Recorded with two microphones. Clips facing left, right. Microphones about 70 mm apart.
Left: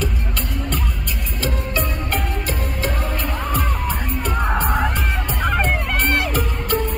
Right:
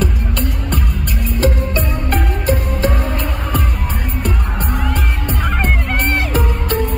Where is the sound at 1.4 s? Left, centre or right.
Right.